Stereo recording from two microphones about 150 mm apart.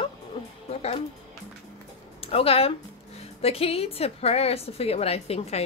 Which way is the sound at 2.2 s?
40° left (ahead or behind).